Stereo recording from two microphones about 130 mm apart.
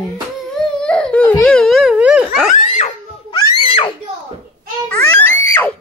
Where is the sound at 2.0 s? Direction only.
5° right (ahead or behind).